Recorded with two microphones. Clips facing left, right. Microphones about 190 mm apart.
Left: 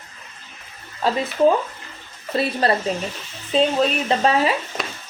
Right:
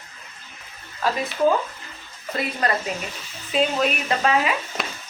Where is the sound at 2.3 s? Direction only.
30° left (ahead or behind).